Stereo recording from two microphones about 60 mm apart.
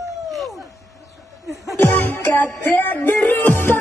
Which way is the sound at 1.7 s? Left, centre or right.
Left.